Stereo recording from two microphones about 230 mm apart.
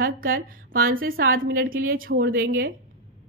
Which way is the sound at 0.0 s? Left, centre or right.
Right.